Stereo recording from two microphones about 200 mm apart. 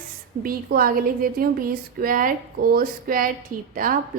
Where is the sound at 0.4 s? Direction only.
45° right (ahead or behind).